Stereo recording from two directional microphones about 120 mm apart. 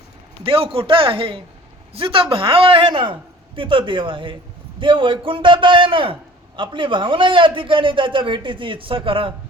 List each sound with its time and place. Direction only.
0.4 s a man's voice: 50° right (ahead or behind)